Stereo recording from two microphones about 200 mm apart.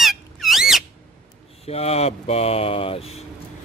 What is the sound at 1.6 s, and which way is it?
A man's voice, 30° left (ahead or behind).